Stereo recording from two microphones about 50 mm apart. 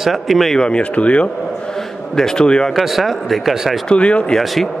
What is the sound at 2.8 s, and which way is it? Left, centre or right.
A man's voice, centre.